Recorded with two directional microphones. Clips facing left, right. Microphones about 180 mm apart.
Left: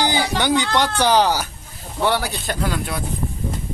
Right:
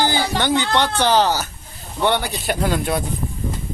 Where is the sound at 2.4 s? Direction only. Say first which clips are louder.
Right 4 dB; 25° right (ahead or behind).